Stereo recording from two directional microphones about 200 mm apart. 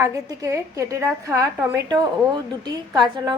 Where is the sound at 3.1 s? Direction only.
20° right (ahead or behind).